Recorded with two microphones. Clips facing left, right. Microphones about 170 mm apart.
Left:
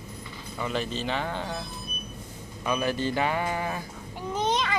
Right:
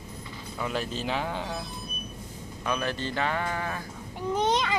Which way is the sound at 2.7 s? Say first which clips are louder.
Left 3 dB; 10° left (ahead or behind).